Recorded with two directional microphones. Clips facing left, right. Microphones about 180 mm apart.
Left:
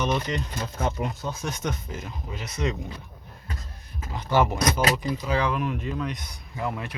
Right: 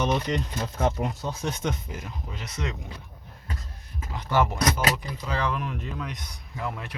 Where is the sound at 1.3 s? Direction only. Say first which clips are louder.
Right 1 dB; 30° right (ahead or behind).